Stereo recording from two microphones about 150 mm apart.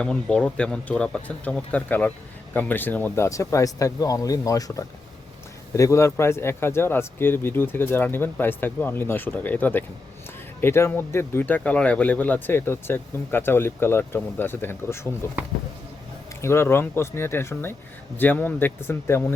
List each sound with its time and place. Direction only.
0.0 s speech: 5° left (ahead or behind)
16.4 s speech: 15° left (ahead or behind)